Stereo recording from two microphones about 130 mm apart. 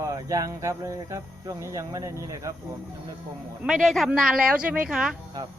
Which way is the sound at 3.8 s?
Centre (ahead or behind).